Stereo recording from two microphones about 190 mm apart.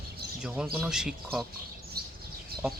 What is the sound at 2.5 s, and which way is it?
Chicken, 55° right (ahead or behind).